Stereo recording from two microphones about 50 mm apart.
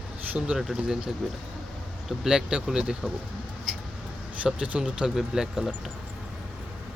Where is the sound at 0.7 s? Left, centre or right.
Centre.